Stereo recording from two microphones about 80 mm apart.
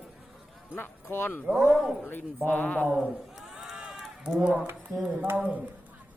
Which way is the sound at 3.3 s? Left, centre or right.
Centre.